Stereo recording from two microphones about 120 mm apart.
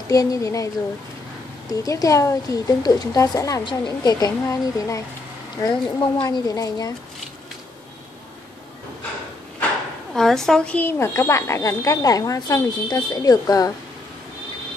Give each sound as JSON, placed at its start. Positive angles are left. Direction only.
{"t": 0.1, "sound": "a woman's voice", "side_deg": 30}
{"t": 1.7, "sound": "a woman's voice", "side_deg": 30}
{"t": 3.6, "sound": "speech", "side_deg": 35}
{"t": 10.1, "sound": "a woman's voice", "side_deg": 5}
{"t": 10.8, "sound": "a woman's voice", "side_deg": 20}